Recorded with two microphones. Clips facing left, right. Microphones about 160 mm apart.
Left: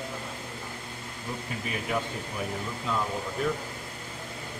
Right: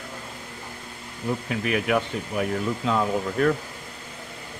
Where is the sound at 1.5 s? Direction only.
90° right.